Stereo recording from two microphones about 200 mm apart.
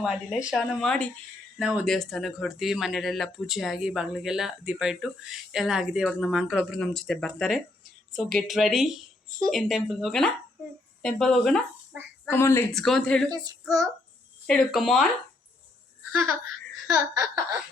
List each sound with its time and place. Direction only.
0.0 s speech: 5° right (ahead or behind); by 12.7 s 15° left (ahead or behind)
12.7 s speech: centre (ahead or behind)
13.3 s child singing: 20° right (ahead or behind)
14.4 s speech: centre (ahead or behind)
16.9 s laughter: 20° right (ahead or behind)